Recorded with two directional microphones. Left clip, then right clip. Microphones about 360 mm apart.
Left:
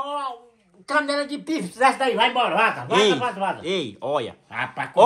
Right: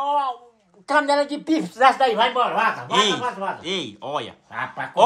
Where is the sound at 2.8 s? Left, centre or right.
Centre.